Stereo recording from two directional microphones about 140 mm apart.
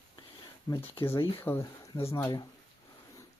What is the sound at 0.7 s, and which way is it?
Speech, 25° left (ahead or behind).